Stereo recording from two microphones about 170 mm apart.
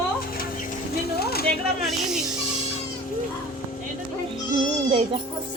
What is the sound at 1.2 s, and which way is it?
Speech, 65° left (ahead or behind).